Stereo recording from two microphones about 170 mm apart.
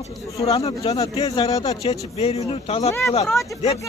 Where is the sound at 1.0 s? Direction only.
30° left (ahead or behind).